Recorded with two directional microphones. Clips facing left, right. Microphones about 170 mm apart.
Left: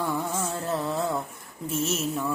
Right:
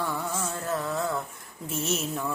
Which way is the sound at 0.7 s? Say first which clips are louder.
Left 1 dB; 20° left (ahead or behind).